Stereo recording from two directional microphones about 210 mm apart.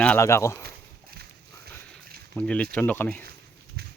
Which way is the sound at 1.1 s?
50° right (ahead or behind).